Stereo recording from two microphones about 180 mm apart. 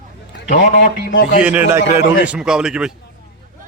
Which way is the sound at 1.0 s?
45° left (ahead or behind).